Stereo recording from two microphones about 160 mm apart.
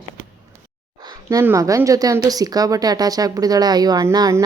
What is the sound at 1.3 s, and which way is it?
A woman's voice, 20° right (ahead or behind).